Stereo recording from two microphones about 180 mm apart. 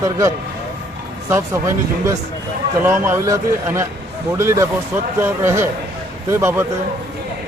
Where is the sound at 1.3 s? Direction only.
15° right (ahead or behind).